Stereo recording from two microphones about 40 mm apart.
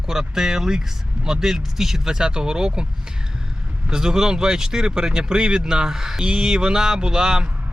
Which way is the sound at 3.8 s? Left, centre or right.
Centre.